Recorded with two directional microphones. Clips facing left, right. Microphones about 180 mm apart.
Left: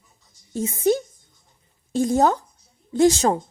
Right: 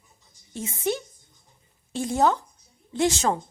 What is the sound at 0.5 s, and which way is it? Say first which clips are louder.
A woman's voice: left 7 dB; 40° left (ahead or behind).